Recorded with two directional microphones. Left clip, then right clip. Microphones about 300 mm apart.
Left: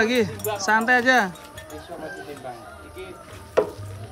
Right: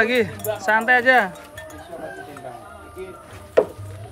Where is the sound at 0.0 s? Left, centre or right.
Centre.